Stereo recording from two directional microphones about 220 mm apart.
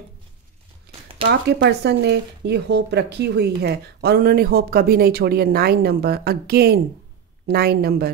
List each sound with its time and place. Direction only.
1.2 s speech: 50° right (ahead or behind)